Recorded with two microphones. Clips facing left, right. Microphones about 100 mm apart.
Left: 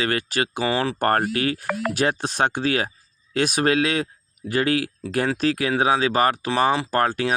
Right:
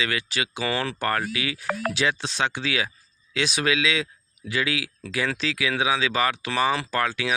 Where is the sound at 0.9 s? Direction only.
50° left (ahead or behind).